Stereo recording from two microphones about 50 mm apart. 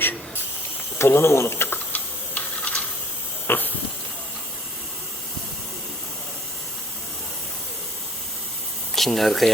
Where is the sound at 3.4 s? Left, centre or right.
Left.